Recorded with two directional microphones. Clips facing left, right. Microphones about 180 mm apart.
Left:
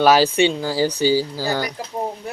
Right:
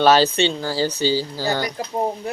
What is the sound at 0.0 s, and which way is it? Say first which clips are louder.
Speech: left 1 dB; 10° left (ahead or behind).